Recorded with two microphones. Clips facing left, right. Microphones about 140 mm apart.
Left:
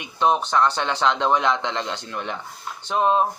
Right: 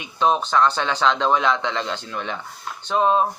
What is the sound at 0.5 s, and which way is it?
Speech, 25° left (ahead or behind).